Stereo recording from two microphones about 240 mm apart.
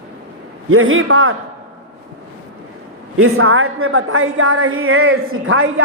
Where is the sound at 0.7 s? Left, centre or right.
Right.